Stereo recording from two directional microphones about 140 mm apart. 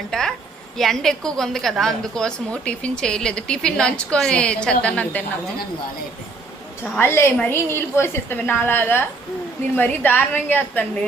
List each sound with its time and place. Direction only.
0.1 s a woman's voice: 5° left (ahead or behind)
6.8 s a woman's voice: 15° left (ahead or behind)